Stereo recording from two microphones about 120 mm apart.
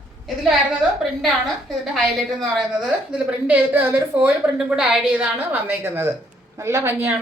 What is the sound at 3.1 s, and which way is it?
A woman's voice, 10° right (ahead or behind).